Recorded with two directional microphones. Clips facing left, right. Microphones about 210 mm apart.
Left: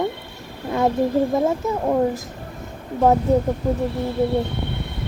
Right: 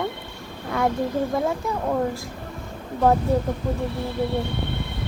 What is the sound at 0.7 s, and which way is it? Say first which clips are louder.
Speech: left 4 dB; 25° left (ahead or behind).